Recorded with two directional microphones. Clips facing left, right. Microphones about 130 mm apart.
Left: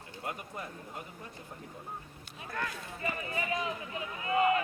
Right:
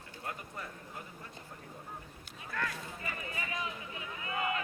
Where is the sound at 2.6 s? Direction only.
30° left (ahead or behind).